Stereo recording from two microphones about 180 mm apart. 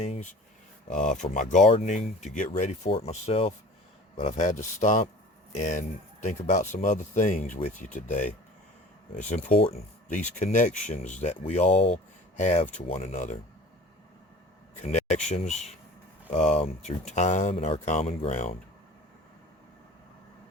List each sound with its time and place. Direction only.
0.0 s speech: 40° left (ahead or behind)
10.1 s speech: 45° left (ahead or behind)
14.8 s speech: 40° left (ahead or behind)